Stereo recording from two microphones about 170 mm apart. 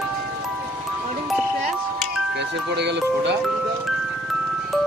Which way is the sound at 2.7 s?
90° right.